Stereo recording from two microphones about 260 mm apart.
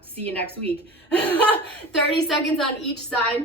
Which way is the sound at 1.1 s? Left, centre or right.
Centre.